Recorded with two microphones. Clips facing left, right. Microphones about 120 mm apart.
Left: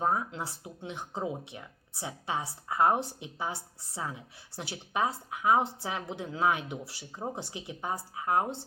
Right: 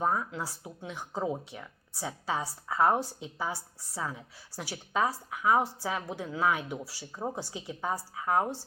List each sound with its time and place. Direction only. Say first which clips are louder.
0.0 s speech: even; 25° left (ahead or behind)